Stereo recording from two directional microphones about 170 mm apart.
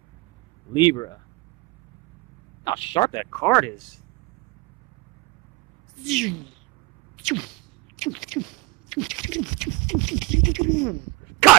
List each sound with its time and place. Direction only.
0.7 s speech: 25° left (ahead or behind)
2.6 s speech: 30° left (ahead or behind)
3.3 s speech: 5° left (ahead or behind)
6.0 s speech: centre (ahead or behind)